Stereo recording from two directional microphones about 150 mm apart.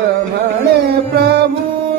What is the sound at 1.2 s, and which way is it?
Music, 90° right.